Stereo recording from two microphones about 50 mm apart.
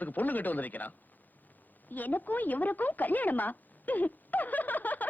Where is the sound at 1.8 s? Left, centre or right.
Left.